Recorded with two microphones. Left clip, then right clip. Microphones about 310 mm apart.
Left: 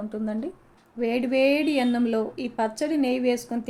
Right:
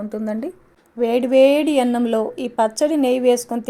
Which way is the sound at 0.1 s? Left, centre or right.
Right.